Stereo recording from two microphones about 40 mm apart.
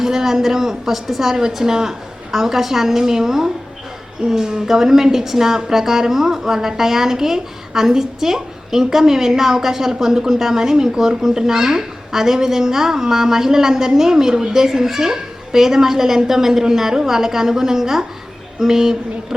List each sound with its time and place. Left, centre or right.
0.0 s a woman's voice: centre